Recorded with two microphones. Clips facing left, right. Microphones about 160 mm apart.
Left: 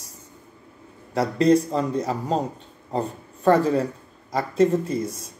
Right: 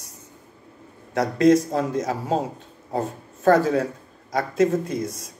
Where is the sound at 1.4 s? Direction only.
90° right.